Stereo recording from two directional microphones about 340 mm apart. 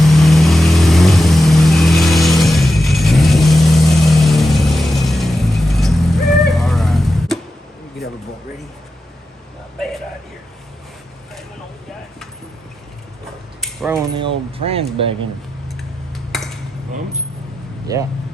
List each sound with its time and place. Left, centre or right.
0.0 s vehicle: centre
13.6 s mechanisms: centre
14.2 s a sound: centre
15.8 s cutlery: centre
17.9 s speech: centre